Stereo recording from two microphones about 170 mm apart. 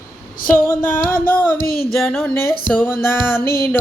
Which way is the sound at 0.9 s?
55° left (ahead or behind).